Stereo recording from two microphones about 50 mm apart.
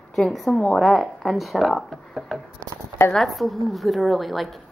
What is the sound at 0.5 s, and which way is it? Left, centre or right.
Speech, centre.